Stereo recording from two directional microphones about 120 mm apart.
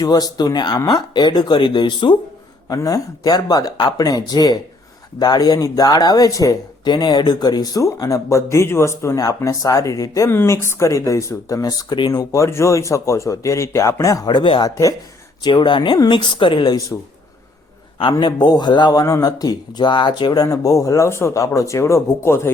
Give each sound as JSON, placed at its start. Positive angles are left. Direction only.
{"t": 0.0, "sound": "speech", "side_deg": 30}
{"t": 2.6, "sound": "speech", "side_deg": 30}
{"t": 18.1, "sound": "speech", "side_deg": 40}